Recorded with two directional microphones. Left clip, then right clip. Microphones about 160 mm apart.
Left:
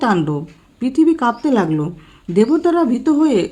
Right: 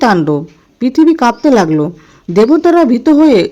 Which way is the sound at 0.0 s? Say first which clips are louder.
Right 7 dB; 40° right (ahead or behind).